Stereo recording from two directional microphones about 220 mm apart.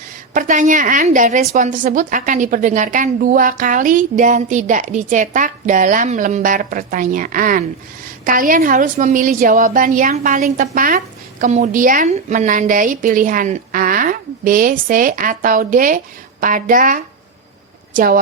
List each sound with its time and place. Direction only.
0.3 s a woman's voice: 35° right (ahead or behind)